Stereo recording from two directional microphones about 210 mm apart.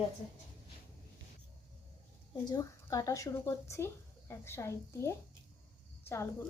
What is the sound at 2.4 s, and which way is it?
A woman's voice, 15° left (ahead or behind).